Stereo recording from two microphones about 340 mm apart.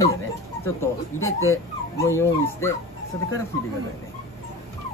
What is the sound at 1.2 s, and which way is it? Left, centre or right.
Speech, left.